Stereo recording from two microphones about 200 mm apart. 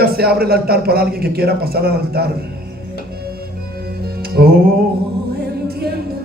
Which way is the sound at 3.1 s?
50° right (ahead or behind).